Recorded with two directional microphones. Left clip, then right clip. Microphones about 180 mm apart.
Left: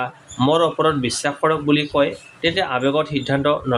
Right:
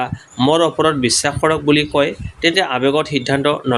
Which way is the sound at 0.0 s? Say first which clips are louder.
Right 3 dB; 40° right (ahead or behind).